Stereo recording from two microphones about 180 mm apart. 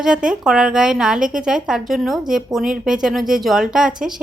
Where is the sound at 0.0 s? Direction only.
5° right (ahead or behind).